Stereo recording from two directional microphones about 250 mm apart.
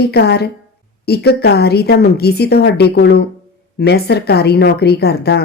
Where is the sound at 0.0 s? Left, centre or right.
Left.